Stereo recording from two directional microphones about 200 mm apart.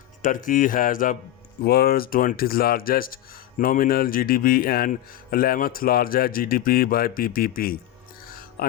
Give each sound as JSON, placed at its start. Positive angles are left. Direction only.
{"t": 0.2, "sound": "speech", "side_deg": 40}
{"t": 8.3, "sound": "music", "side_deg": 50}